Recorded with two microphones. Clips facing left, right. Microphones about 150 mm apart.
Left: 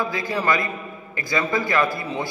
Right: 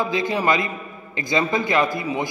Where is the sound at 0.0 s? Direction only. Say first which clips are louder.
Right 3 dB; 20° right (ahead or behind).